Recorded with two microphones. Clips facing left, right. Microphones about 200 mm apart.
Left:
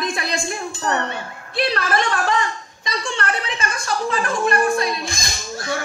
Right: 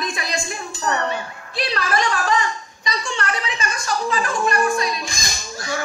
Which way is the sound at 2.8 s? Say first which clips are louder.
Left 1 dB; 55° left (ahead or behind).